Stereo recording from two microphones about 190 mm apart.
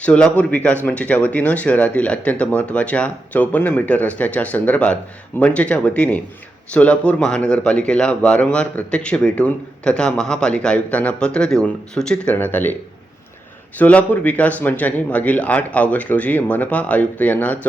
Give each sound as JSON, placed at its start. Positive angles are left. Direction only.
{"t": 0.0, "sound": "speech", "side_deg": 5}
{"t": 13.7, "sound": "speech", "side_deg": 10}